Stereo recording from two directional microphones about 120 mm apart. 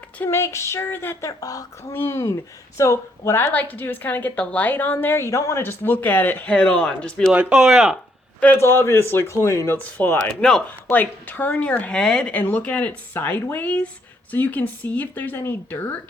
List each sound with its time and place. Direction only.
0.2 s a man's voice: 20° left (ahead or behind)
1.3 s speech: 30° left (ahead or behind); by 7.3 s 5° left (ahead or behind)
7.3 s speech: 5° right (ahead or behind)
8.4 s a man's voice: 15° left (ahead or behind)
9.8 s speech: 15° left (ahead or behind)